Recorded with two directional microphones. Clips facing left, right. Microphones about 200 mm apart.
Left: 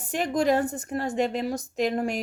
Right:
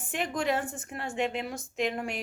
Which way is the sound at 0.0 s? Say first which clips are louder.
Left 6 dB; 40° left (ahead or behind).